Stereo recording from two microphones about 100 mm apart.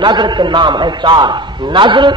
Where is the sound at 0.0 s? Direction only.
50° right (ahead or behind).